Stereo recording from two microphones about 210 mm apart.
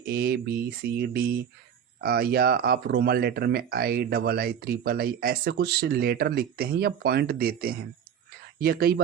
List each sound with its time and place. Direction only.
0.0 s speech: 45° right (ahead or behind)